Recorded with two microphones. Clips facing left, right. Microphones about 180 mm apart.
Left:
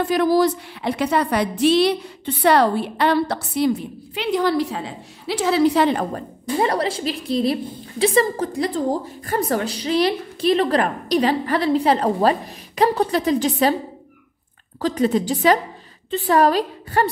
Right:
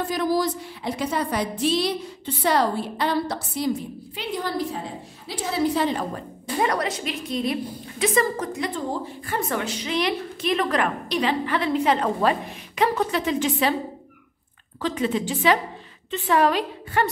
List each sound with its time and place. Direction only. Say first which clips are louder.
0.0 s a woman's voice: left 6 dB; 65° left (ahead or behind)
6.6 s a woman's voice: left 3 dB; 30° left (ahead or behind)
14.8 s a woman's voice: left 5 dB; 40° left (ahead or behind)